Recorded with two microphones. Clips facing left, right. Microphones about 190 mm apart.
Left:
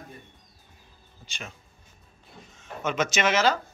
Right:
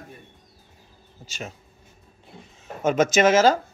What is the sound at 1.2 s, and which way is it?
Speech, 40° right (ahead or behind).